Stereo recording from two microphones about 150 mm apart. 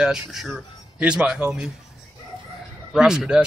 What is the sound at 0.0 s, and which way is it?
Speech, 5° right (ahead or behind).